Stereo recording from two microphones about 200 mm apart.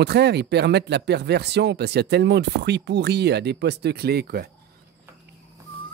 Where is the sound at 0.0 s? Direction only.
55° right (ahead or behind).